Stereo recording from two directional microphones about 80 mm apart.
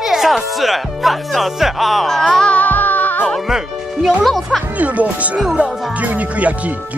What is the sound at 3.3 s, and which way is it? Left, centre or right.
Speech, centre.